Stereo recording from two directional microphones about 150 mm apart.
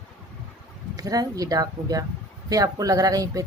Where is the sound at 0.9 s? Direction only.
25° right (ahead or behind).